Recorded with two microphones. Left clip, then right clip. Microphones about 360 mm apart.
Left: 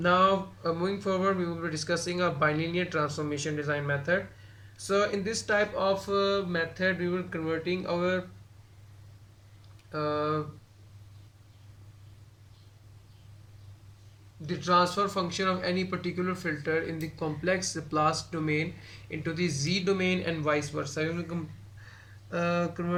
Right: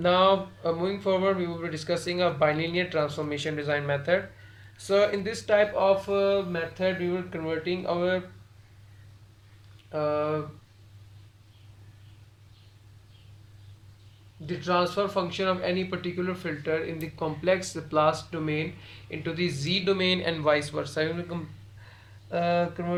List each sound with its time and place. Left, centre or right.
0.0 s speech: centre
9.9 s speech: centre
14.4 s speech: centre